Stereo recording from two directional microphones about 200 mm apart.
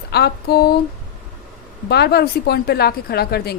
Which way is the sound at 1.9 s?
55° left (ahead or behind).